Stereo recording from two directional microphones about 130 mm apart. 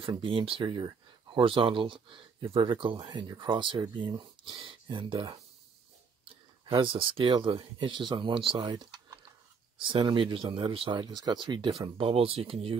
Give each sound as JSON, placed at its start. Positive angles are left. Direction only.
{"t": 0.2, "sound": "speech", "side_deg": -40}
{"t": 11.8, "sound": "speech", "side_deg": -45}